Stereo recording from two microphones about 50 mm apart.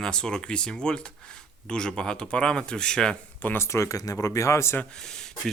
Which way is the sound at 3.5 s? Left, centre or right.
Left.